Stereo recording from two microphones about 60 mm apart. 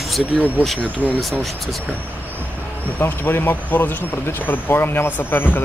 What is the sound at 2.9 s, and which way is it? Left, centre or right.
Speech, left.